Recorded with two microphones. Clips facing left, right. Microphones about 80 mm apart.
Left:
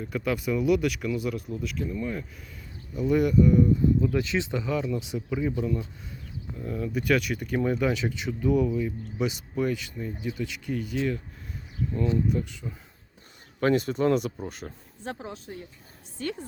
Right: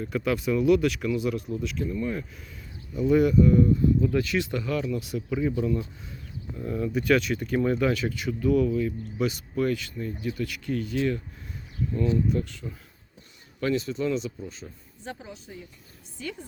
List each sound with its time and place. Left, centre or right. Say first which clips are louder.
0.0 s speech: right 2 dB; centre
4.2 s speech: right 1 dB; left
5.4 s speech: right 2 dB; centre
7.9 s speech: right 1 dB; centre
11.9 s speech: right 1 dB; centre
13.6 s a woman's voice: left 3 dB; left